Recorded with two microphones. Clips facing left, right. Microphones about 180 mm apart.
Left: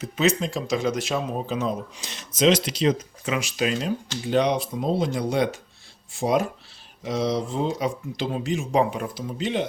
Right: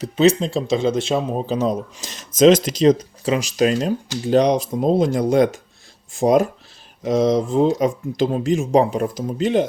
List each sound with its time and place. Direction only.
0.0 s speech: 30° right (ahead or behind)